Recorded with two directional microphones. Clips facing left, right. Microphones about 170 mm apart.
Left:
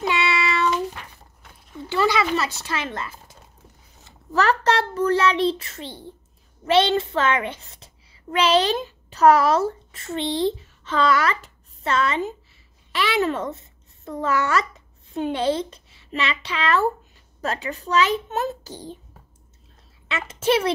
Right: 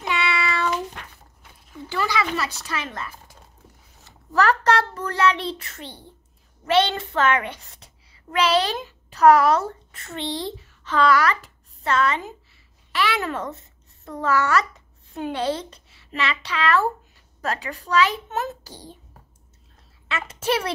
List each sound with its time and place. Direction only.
1.9 s a child's voice: 25° left (ahead or behind)
20.1 s a woman's voice: 25° left (ahead or behind)